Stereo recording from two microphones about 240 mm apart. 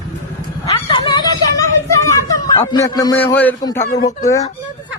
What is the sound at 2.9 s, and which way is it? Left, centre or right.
Speech, centre.